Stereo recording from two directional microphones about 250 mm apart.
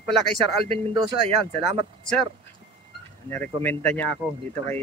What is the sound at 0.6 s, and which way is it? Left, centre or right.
Speech, right.